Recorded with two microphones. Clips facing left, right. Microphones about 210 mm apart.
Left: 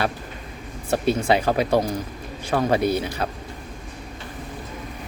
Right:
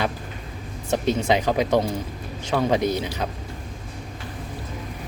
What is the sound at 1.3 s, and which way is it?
Speech, 15° right (ahead or behind).